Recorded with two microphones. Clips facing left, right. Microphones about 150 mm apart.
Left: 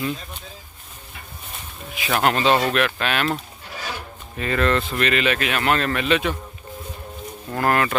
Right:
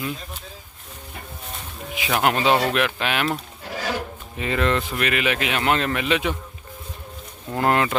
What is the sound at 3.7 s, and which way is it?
Music, 90° right.